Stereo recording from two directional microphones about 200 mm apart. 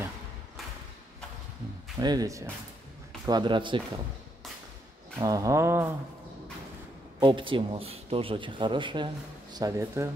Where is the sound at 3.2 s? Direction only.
20° right (ahead or behind).